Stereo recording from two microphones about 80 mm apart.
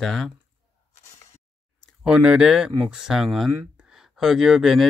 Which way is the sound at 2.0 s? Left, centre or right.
Centre.